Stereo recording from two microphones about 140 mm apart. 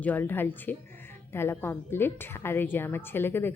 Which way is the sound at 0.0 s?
10° left (ahead or behind).